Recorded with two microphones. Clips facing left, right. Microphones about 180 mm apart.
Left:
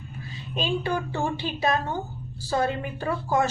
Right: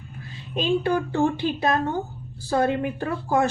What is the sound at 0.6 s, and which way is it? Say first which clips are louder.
A woman's voice: right 5 dB; 55° right (ahead or behind).